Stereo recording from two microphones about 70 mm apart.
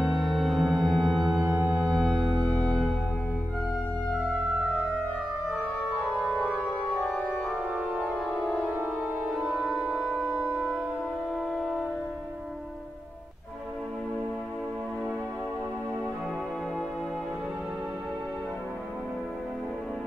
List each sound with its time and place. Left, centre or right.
0.0 s music: centre
1.4 s music: right
1.9 s music: centre
7.0 s music: centre
7.7 s organ: right
8.7 s music: right
9.2 s music: centre
9.9 s music: left
11.5 s train: centre